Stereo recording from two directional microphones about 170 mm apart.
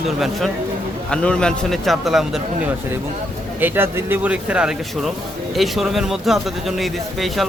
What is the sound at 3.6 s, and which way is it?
A man's voice, 10° right (ahead or behind).